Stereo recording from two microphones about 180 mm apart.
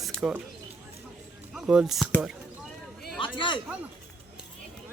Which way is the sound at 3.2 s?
30° left (ahead or behind).